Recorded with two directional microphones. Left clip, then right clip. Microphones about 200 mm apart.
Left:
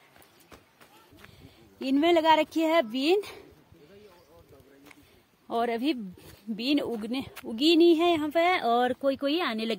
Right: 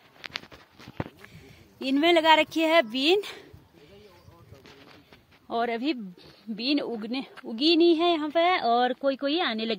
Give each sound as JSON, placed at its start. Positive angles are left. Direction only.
{"t": 1.8, "sound": "speech", "side_deg": 0}
{"t": 5.5, "sound": "speech", "side_deg": 20}